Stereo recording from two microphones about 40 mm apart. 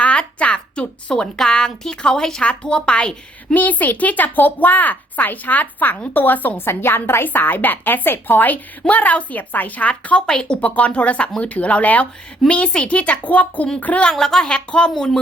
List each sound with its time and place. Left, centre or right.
0.0 s a sound: left
1.4 s a woman's voice: centre
2.4 s speech: left
3.5 s speech: left
6.7 s a woman's voice: left
7.3 s speech: left
8.9 s a woman's voice: left
10.2 s speech: centre
10.6 s a woman's voice: left
12.5 s a woman's voice: left
14.2 s a woman's voice: centre